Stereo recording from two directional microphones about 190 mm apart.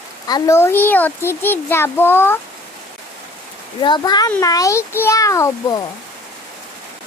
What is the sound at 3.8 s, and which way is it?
A child's voice, 25° left (ahead or behind).